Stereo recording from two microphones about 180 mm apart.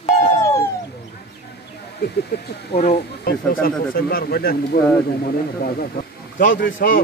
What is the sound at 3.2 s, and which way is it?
Speech, 55° left (ahead or behind).